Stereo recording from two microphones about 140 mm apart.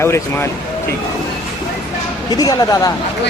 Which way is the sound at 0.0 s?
15° left (ahead or behind).